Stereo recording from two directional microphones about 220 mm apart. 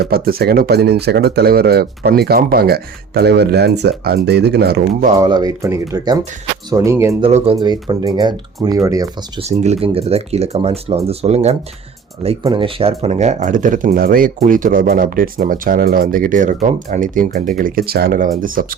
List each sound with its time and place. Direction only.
0.0 s speech: 45° right (ahead or behind)
5.1 s speech: 15° right (ahead or behind)
7.2 s speech: 25° right (ahead or behind)